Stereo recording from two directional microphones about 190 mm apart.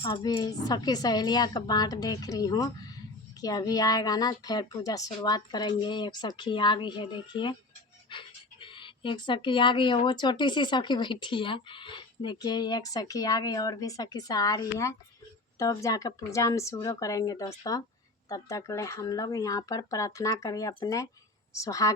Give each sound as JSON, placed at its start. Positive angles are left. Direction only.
{"t": 0.0, "sound": "speech", "side_deg": 20}